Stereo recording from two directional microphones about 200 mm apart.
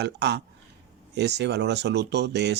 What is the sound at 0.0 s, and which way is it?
Speech, 55° right (ahead or behind).